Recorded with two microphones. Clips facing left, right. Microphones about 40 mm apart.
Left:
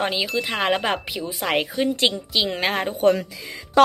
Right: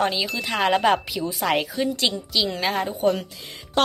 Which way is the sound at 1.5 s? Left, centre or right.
Left.